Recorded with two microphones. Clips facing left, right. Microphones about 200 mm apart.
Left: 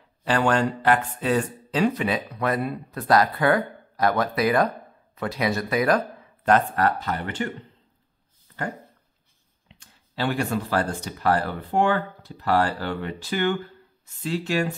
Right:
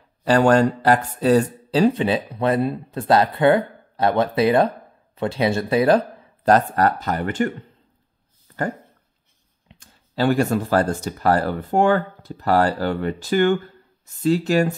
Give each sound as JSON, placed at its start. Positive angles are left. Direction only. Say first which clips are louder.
{"t": 0.2, "sound": "speech", "louder": "right 6 dB", "side_deg": -40}
{"t": 9.7, "sound": "speech", "louder": "right 3 dB", "side_deg": -45}